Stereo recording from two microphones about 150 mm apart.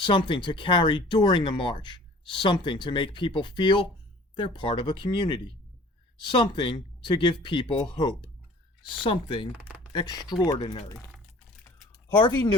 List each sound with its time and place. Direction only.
0.0 s speech: 35° left (ahead or behind)
9.5 s speech: 10° right (ahead or behind)
9.9 s speech: 30° left (ahead or behind)
12.2 s speech: 30° left (ahead or behind)